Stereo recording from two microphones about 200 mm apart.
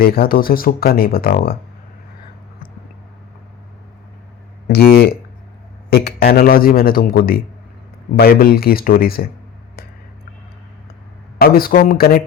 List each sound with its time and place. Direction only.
0.0 s speech: 50° left (ahead or behind)
4.7 s speech: 50° left (ahead or behind)
11.3 s speech: 50° left (ahead or behind)